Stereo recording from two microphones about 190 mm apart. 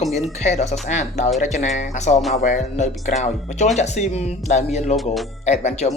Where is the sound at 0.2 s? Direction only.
35° left (ahead or behind).